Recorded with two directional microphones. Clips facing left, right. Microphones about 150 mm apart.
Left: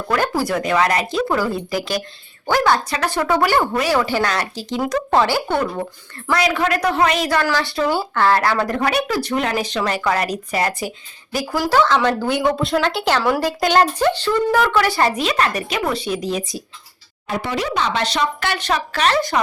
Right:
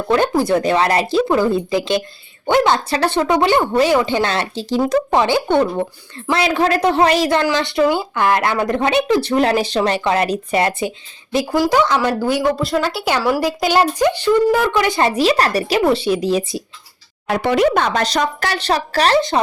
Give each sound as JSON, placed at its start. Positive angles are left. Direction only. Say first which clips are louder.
{"t": 0.1, "sound": "a woman's voice", "louder": "right 5 dB", "side_deg": -25}
{"t": 4.9, "sound": "a woman's voice", "louder": "even", "side_deg": -15}
{"t": 9.3, "sound": "a woman's voice", "louder": "right 5 dB", "side_deg": -35}
{"t": 15.1, "sound": "speech", "louder": "right 5 dB", "side_deg": -30}
{"t": 17.2, "sound": "speech", "louder": "right 8 dB", "side_deg": -60}